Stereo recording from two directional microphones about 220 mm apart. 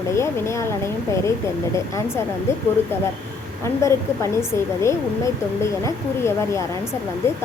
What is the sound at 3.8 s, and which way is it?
A woman's voice, 15° left (ahead or behind).